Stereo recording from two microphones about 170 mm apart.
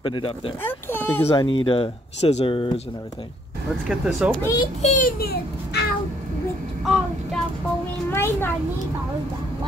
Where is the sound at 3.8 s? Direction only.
5° right (ahead or behind).